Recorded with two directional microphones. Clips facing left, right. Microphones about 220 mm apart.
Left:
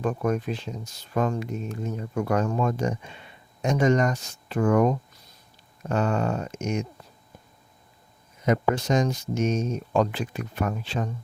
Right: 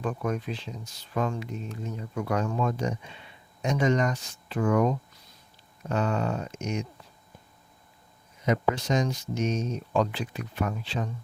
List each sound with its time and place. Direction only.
0.0 s speech: 45° left (ahead or behind)
8.4 s speech: 45° left (ahead or behind)